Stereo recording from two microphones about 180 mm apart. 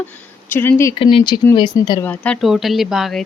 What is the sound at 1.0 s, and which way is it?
Speech, 30° left (ahead or behind).